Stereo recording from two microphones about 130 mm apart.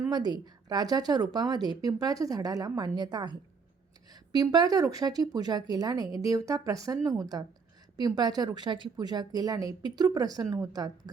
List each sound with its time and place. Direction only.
0.1 s a woman's voice: 35° right (ahead or behind)